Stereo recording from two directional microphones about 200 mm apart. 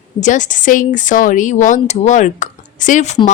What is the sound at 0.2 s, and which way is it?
A woman's voice, 40° left (ahead or behind).